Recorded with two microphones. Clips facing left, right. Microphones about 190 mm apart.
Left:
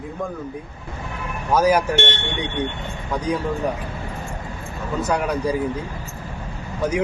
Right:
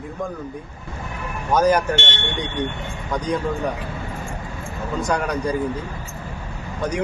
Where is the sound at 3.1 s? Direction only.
5° left (ahead or behind).